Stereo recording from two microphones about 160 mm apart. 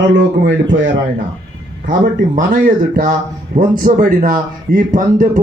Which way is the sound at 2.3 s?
55° right (ahead or behind).